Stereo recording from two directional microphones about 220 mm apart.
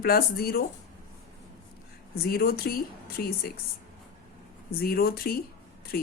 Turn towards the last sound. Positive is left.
turn(degrees=40)  # may be behind; listen again after turning